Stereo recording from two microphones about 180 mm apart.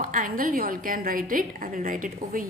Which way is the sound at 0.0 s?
50° right (ahead or behind).